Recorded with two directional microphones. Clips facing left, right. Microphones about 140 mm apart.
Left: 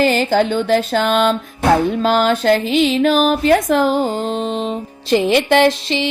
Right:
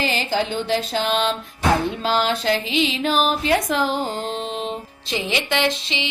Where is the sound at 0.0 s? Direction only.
45° left (ahead or behind).